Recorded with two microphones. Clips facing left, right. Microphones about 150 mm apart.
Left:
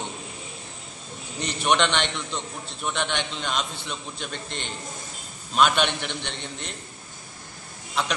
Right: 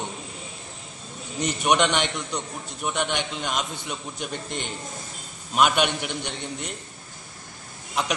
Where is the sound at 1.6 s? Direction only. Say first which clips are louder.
Right 1 dB; 15° right (ahead or behind).